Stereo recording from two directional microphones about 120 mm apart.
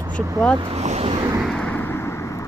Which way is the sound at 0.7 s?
65° right (ahead or behind).